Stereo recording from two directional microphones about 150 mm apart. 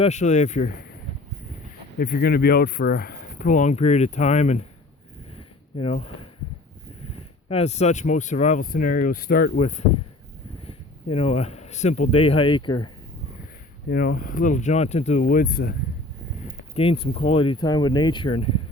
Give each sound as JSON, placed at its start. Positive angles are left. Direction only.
{"t": 0.0, "sound": "speech", "side_deg": 50}
{"t": 2.0, "sound": "speech", "side_deg": 75}
{"t": 5.7, "sound": "speech", "side_deg": 40}
{"t": 7.4, "sound": "speech", "side_deg": 45}
{"t": 9.6, "sound": "speech", "side_deg": 50}
{"t": 13.9, "sound": "speech", "side_deg": 70}
{"t": 16.7, "sound": "speech", "side_deg": 35}